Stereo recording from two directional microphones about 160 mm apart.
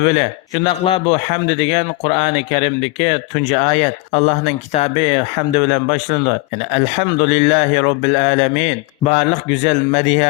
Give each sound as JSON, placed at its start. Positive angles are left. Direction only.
{"t": 0.0, "sound": "speech", "side_deg": 40}
{"t": 1.5, "sound": "speech", "side_deg": 30}